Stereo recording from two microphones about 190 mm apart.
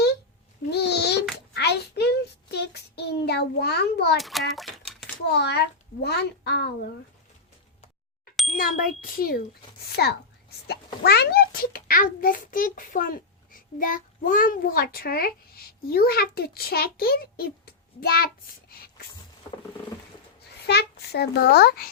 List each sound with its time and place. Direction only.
0.7 s babbling: 60° left (ahead or behind)
1.5 s child singing: 60° left (ahead or behind)
4.2 s a child's voice: centre (ahead or behind)
5.3 s a child's voice: 60° left (ahead or behind)
8.5 s a child's voice: 50° left (ahead or behind)
18.7 s a sound: 50° left (ahead or behind)
20.7 s a child's voice: 60° left (ahead or behind)